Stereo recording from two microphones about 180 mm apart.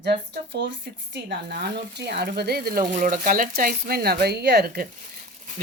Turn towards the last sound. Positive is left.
turn(degrees=-65)  # may be behind; listen again after turning